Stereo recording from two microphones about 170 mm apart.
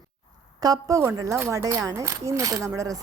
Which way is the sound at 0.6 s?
20° right (ahead or behind).